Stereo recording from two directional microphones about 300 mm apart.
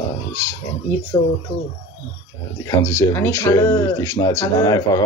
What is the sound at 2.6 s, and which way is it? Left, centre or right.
Speech, centre.